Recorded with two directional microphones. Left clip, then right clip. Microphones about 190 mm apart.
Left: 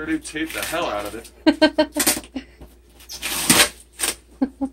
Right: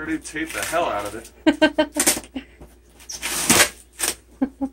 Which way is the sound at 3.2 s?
Centre (ahead or behind).